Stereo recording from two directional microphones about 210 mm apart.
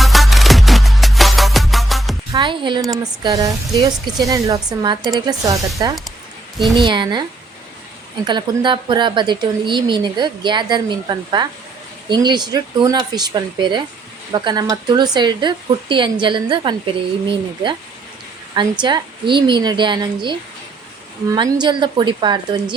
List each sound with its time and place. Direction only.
0.0 s music: centre (ahead or behind)
2.3 s music: 20° right (ahead or behind)
2.9 s speech: 15° right (ahead or behind)